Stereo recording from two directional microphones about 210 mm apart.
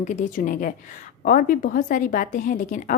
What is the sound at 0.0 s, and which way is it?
A woman's voice, 35° left (ahead or behind).